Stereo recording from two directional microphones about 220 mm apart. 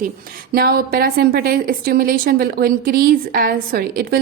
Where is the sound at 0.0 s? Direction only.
40° right (ahead or behind).